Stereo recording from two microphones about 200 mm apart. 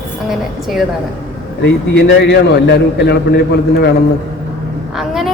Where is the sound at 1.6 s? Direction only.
60° left (ahead or behind).